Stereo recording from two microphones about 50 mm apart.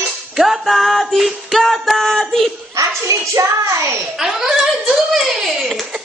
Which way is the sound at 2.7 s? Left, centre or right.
Right.